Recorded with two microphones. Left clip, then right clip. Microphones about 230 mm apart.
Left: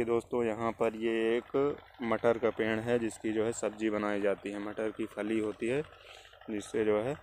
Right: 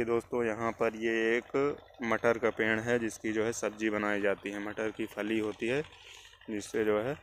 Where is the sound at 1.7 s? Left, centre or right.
Right.